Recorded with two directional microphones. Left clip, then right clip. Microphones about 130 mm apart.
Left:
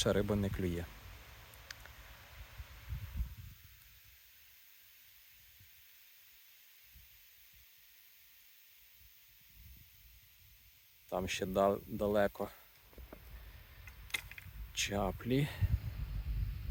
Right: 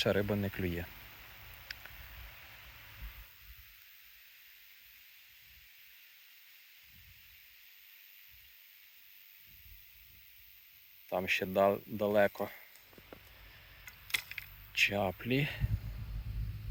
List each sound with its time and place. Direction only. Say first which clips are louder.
0.0 s speech: right 2 dB; 15° left (ahead or behind)
1.7 s a sound: right 4 dB; 15° left (ahead or behind)
11.1 s speech: right 4 dB; centre (ahead or behind)
14.1 s mechanisms: right 5 dB; 70° right (ahead or behind)
14.7 s speech: right 6 dB; 5° left (ahead or behind)